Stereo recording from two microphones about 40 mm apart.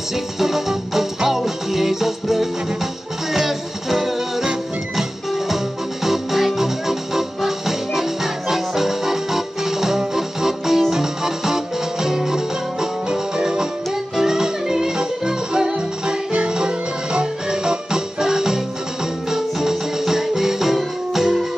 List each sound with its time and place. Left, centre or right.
0.4 s music: centre
6.0 s music: centre